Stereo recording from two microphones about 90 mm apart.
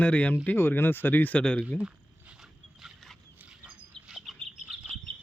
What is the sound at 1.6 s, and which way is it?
Dog, 10° right (ahead or behind).